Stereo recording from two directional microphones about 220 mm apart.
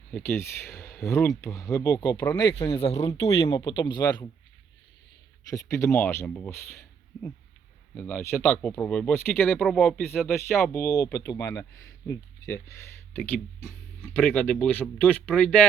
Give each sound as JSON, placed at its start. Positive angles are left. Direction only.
{"t": 0.1, "sound": "speech", "side_deg": 10}
{"t": 5.5, "sound": "speech", "side_deg": 15}
{"t": 7.9, "sound": "speech", "side_deg": 10}